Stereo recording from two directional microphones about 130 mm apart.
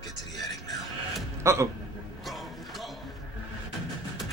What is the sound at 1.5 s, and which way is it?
Speech, 20° right (ahead or behind).